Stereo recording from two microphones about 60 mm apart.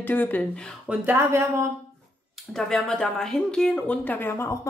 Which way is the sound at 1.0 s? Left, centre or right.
Right.